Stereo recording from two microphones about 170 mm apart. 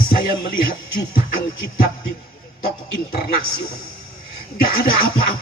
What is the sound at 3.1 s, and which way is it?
Music, 60° left (ahead or behind).